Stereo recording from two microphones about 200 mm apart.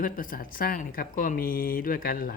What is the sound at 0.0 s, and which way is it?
Speech, 45° left (ahead or behind).